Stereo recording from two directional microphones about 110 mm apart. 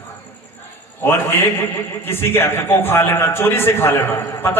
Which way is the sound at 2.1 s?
20° left (ahead or behind).